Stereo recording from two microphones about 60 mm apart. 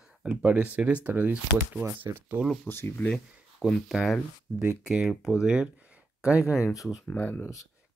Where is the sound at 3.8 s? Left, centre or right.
Centre.